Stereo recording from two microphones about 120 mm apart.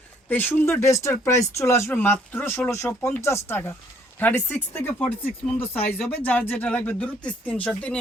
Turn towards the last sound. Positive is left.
turn(degrees=10)  # may be behind; listen again after turning